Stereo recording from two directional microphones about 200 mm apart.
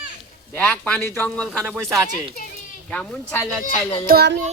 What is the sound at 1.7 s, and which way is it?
Speech, 15° right (ahead or behind).